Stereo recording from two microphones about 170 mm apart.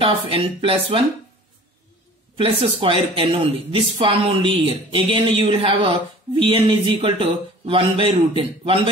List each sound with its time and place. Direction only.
0.0 s a man's voice: 30° right (ahead or behind)
2.3 s a man's voice: 30° right (ahead or behind)